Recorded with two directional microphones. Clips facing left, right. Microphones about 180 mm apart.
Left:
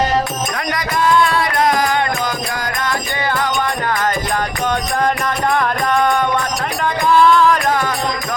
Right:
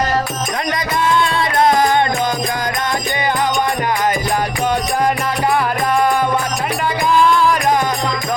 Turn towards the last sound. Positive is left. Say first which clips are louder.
# even
turn(degrees=-15)  # may be behind; listen again after turning